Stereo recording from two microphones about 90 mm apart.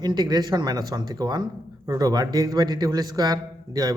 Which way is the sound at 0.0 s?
50° right (ahead or behind).